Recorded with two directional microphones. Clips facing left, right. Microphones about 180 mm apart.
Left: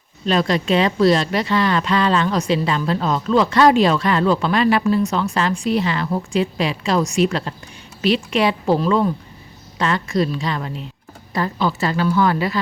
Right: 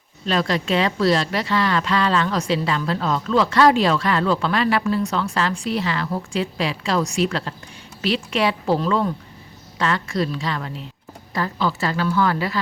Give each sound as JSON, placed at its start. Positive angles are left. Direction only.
{"t": 0.3, "sound": "a woman's voice", "side_deg": 20}